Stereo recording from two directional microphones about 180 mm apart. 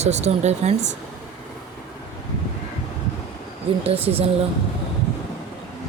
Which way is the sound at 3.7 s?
30° right (ahead or behind).